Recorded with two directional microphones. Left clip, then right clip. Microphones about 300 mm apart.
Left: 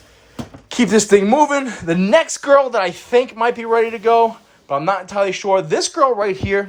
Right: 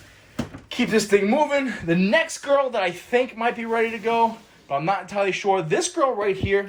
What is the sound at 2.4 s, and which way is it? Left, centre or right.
Speech, left.